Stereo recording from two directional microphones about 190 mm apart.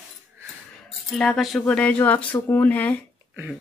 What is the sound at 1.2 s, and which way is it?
Speech, centre (ahead or behind).